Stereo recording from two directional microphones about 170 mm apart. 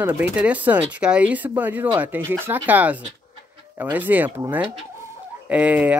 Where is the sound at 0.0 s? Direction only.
10° right (ahead or behind).